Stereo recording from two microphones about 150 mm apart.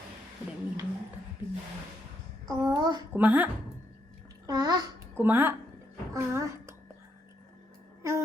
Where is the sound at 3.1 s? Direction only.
10° right (ahead or behind).